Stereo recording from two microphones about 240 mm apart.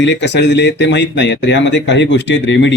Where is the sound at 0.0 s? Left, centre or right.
Left.